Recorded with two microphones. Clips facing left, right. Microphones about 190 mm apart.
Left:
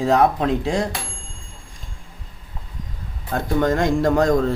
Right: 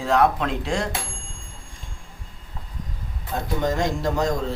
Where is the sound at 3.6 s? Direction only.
55° left (ahead or behind).